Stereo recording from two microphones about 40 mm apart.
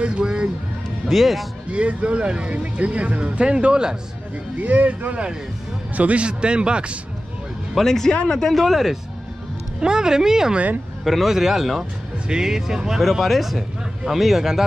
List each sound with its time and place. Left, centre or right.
0.0 s music: right
1.0 s speech: centre
1.7 s speech: right
4.6 s a man's voice: right
7.8 s speech: centre
8.1 s speech: left
8.4 s speech: centre
9.8 s speech: centre
13.1 s speech: centre